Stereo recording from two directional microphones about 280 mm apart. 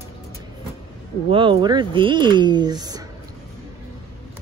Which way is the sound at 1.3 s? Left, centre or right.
Centre.